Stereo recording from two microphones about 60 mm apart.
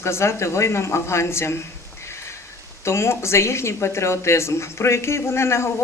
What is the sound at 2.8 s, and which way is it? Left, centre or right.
Speech, left.